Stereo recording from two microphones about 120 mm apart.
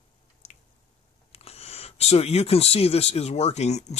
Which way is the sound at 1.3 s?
60° left (ahead or behind).